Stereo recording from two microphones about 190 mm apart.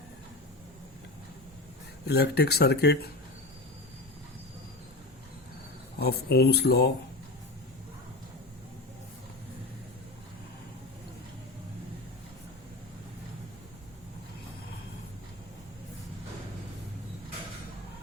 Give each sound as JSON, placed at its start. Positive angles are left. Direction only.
{"t": 2.0, "sound": "speech", "side_deg": 60}
{"t": 6.0, "sound": "speech", "side_deg": 55}